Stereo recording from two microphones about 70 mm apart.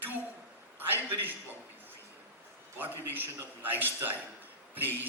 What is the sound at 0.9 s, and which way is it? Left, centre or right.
Speech, right.